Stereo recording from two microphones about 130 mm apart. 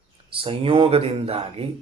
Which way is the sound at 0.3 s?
45° right (ahead or behind).